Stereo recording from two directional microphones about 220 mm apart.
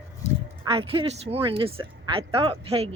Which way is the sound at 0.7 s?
25° right (ahead or behind).